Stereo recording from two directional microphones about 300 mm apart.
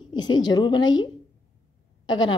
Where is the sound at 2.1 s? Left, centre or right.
Centre.